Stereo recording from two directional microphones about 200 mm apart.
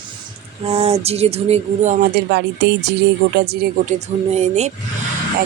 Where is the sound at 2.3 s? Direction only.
60° right (ahead or behind).